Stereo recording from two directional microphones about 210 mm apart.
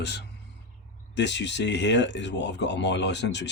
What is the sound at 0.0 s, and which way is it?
Speech, 50° left (ahead or behind).